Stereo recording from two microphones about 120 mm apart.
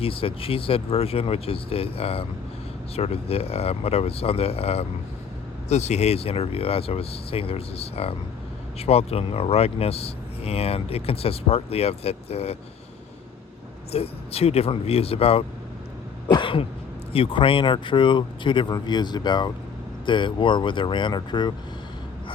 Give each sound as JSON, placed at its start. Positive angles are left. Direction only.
{"t": 0.0, "sound": "speech", "side_deg": 50}
{"t": 5.6, "sound": "speech", "side_deg": 65}
{"t": 13.9, "sound": "speech", "side_deg": 55}
{"t": 16.3, "sound": "throat clearing", "side_deg": 45}
{"t": 17.1, "sound": "speech", "side_deg": 50}